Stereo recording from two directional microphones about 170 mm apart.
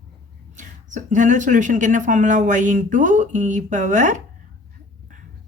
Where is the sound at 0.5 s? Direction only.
45° right (ahead or behind).